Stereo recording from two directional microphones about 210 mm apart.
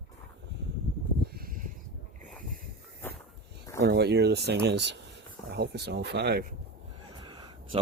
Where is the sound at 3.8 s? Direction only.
50° right (ahead or behind).